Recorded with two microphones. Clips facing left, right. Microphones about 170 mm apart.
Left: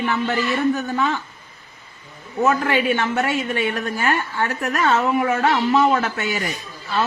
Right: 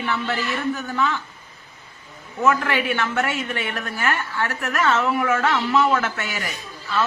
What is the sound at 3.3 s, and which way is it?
Speech, 15° left (ahead or behind).